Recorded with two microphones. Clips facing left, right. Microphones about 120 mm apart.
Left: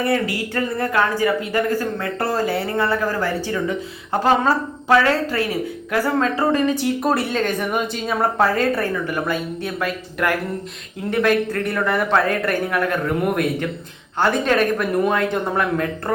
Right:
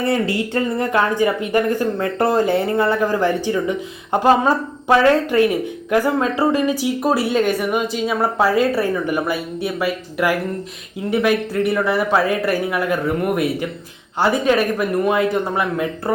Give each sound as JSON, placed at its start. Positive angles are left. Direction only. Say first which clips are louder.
{"t": 0.0, "sound": "a woman's voice", "louder": "right 2 dB", "side_deg": -25}